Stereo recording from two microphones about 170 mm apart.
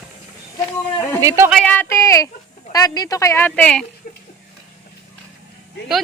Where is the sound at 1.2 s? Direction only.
15° right (ahead or behind).